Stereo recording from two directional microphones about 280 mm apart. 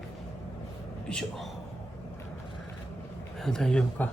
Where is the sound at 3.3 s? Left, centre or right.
Centre.